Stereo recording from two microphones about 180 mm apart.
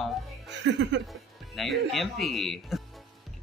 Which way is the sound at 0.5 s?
75° right (ahead or behind).